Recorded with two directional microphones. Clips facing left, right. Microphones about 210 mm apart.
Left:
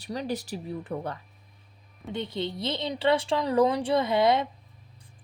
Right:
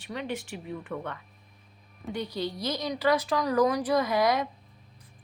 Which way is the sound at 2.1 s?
25° left (ahead or behind).